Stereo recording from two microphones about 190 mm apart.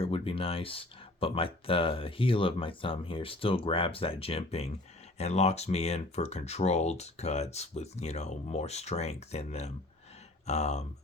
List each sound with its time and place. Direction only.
0.0 s speech: 30° left (ahead or behind)